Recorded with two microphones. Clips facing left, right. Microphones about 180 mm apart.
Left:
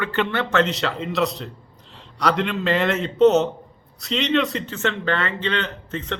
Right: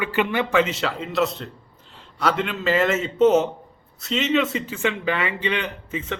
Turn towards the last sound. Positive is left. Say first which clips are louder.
# even
turn(degrees=-5)  # may be behind; listen again after turning